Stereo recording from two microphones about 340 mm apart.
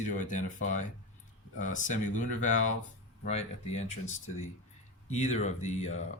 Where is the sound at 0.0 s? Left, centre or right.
Left.